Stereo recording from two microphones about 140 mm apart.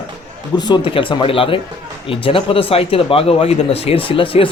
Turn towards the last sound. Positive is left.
turn(degrees=40)  # may be behind; listen again after turning